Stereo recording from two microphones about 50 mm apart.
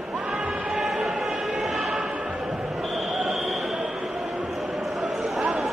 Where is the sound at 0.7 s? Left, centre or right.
Centre.